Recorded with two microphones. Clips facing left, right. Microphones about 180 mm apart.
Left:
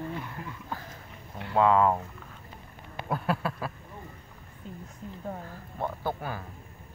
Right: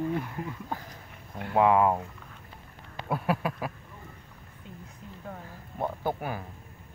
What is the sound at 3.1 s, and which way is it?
Speech, 10° right (ahead or behind).